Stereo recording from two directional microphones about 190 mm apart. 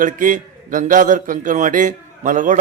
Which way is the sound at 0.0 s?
45° right (ahead or behind).